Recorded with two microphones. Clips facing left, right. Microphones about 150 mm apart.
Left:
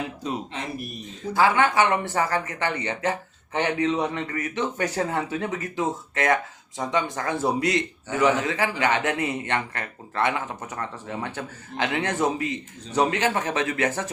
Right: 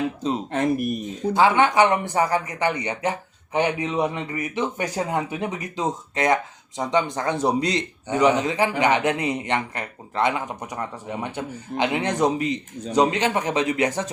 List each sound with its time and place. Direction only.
0.2 s speech: 25° right (ahead or behind)
0.5 s speech: 50° right (ahead or behind)
1.3 s speech: 20° right (ahead or behind)